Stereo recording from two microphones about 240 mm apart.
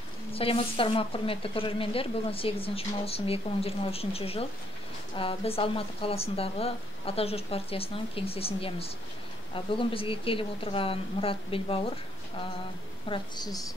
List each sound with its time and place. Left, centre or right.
0.3 s a woman's voice: left
13.1 s a woman's voice: centre